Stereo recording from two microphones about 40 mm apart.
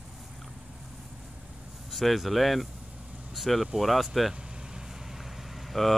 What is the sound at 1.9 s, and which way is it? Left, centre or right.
Speech, centre.